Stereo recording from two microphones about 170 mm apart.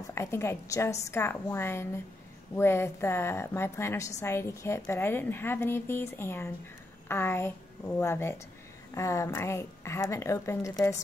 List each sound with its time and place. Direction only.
0.1 s a woman's voice: 15° left (ahead or behind)